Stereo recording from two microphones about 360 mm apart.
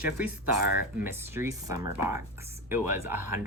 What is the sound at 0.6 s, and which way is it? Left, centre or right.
Speech, left.